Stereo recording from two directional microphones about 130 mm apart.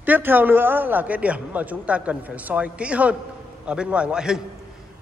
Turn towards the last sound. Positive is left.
turn(degrees=-5)  # may be behind; listen again after turning